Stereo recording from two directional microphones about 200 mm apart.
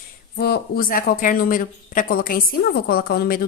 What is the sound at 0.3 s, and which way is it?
Speech, 50° left (ahead or behind).